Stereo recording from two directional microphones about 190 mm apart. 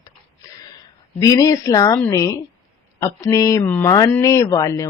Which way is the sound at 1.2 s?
15° left (ahead or behind).